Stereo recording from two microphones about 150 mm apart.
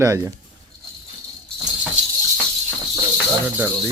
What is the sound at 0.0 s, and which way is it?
Speech, 20° right (ahead or behind).